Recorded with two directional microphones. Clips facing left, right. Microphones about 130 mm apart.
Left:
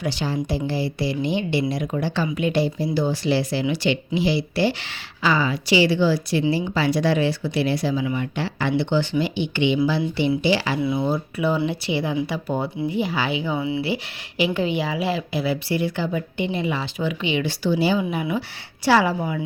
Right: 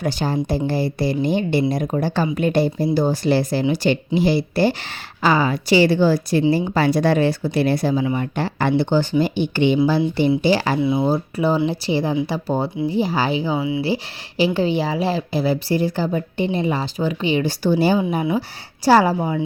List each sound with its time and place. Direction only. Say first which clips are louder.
0.0 s speech: right 3 dB; 50° right (ahead or behind)
10.8 s speech: right 4 dB; 25° right (ahead or behind)
11.0 s speech: right 3 dB; 35° right (ahead or behind)
13.6 s speech: right 2 dB; 15° right (ahead or behind)
13.8 s speech: right 4 dB; 35° right (ahead or behind)